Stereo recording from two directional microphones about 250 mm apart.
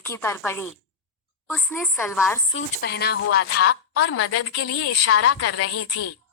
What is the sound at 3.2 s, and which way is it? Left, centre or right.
A woman's voice, left.